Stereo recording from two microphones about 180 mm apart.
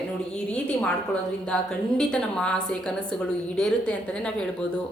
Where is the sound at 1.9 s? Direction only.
5° left (ahead or behind).